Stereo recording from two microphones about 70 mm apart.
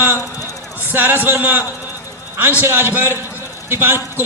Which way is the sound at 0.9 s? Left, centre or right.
Right.